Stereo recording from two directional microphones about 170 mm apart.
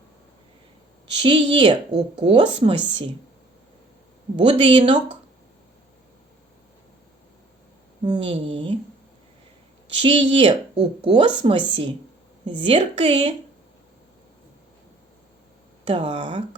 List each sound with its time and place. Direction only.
1.2 s speech: 30° right (ahead or behind)
4.4 s speech: 30° right (ahead or behind)
8.1 s a woman's voice: 30° right (ahead or behind)
10.0 s a woman's voice: 30° right (ahead or behind)
15.9 s a woman's voice: 30° right (ahead or behind)